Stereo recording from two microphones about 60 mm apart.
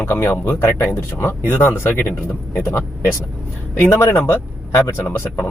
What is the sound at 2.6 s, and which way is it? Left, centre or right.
Speech, left.